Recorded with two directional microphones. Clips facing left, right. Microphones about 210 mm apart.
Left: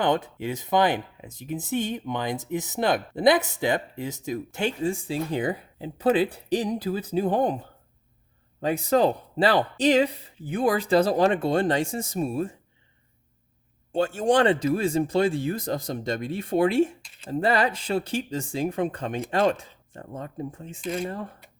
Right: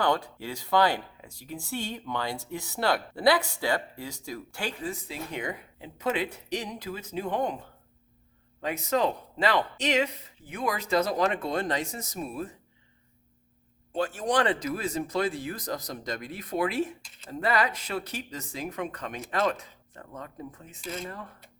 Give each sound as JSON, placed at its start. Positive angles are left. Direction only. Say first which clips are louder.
{"t": 0.0, "sound": "speech", "louder": "left 3 dB", "side_deg": 20}
{"t": 8.6, "sound": "speech", "louder": "left 6 dB", "side_deg": 30}
{"t": 13.9, "sound": "speech", "louder": "left 6 dB", "side_deg": 25}